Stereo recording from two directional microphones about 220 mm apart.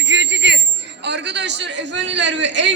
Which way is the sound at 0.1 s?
55° right (ahead or behind).